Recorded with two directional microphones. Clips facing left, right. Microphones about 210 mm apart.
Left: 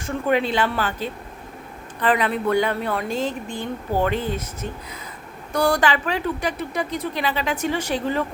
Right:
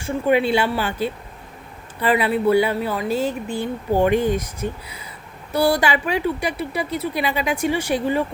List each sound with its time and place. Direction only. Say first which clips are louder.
0.0 s speech: right 3 dB; 10° right (ahead or behind)